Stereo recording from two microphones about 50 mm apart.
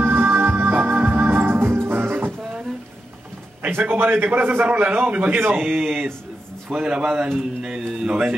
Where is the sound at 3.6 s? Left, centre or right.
Right.